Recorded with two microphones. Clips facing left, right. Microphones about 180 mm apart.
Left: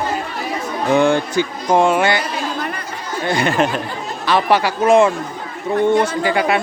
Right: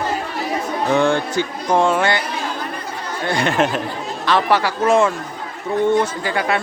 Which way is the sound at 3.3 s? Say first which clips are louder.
Left 1 dB; centre (ahead or behind).